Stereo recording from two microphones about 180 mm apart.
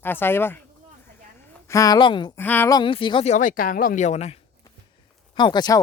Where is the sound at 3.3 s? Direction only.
45° left (ahead or behind).